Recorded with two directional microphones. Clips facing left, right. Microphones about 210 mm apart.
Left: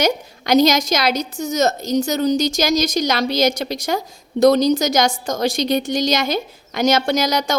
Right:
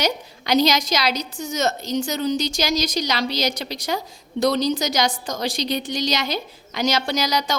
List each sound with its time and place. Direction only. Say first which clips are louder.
0.0 s a woman's voice: left 5 dB; 50° left (ahead or behind)